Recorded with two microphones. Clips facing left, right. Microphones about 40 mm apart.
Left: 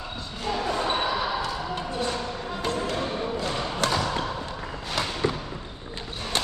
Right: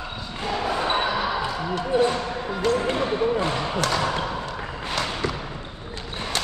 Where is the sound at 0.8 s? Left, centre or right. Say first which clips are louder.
Right 2 dB; right.